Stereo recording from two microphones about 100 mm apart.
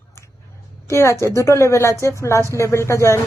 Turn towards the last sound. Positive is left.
turn(degrees=30)  # may be behind; listen again after turning